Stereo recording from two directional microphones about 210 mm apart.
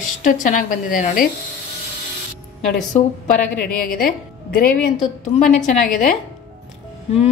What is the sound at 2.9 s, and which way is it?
A woman's voice, 35° left (ahead or behind).